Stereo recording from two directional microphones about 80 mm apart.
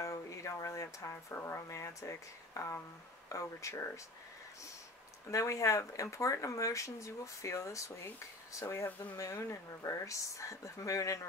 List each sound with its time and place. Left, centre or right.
0.0 s speech: left
5.3 s speech: left
8.6 s speech: left
9.1 s speech: left